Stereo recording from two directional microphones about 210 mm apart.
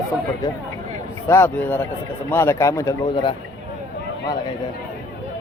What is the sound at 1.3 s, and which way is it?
Speech, 10° left (ahead or behind).